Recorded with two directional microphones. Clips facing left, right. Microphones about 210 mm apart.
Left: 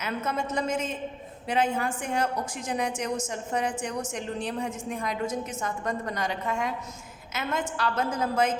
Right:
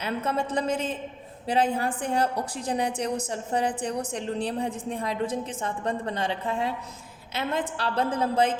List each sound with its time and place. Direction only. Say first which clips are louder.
0.0 s a woman's voice: right 2 dB; 35° right (ahead or behind)